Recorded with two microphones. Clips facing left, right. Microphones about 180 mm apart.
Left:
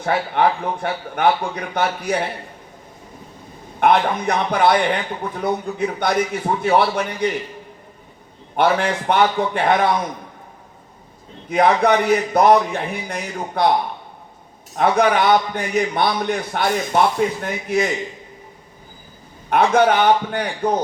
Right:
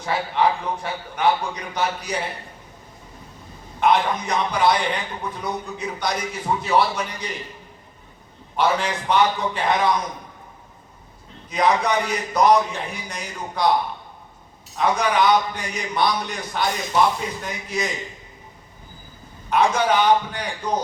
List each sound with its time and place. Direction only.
0.0 s a man's voice: 55° left (ahead or behind)
3.8 s a man's voice: 55° left (ahead or behind)
8.5 s a man's voice: 55° left (ahead or behind)
11.4 s a man's voice: 55° left (ahead or behind)
14.8 s a man's voice: 55° left (ahead or behind)
19.5 s a man's voice: 55° left (ahead or behind)